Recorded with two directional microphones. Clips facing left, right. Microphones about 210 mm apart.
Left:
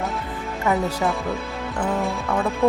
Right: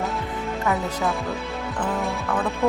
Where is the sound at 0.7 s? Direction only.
Centre (ahead or behind).